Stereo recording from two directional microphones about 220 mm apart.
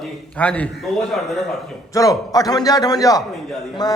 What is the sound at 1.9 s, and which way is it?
A man's voice, 15° left (ahead or behind).